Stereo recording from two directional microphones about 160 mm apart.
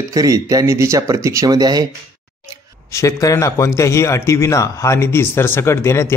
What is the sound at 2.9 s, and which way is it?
A man's voice, 20° left (ahead or behind).